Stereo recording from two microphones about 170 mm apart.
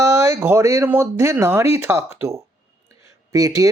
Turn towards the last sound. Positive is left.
turn(degrees=-20)  # may be behind; listen again after turning